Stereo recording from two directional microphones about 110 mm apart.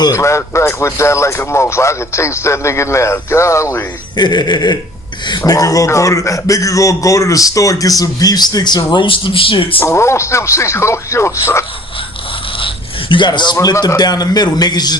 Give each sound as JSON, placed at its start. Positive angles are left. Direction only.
{"t": 0.0, "sound": "speech", "side_deg": 30}
{"t": 4.2, "sound": "a man's voice", "side_deg": 40}
{"t": 9.8, "sound": "speech", "side_deg": 25}
{"t": 12.5, "sound": "speech", "side_deg": 50}